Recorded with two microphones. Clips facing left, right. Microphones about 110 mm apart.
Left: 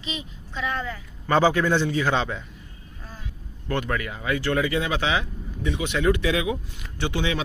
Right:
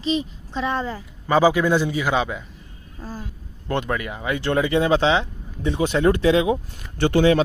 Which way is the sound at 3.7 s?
20° right (ahead or behind).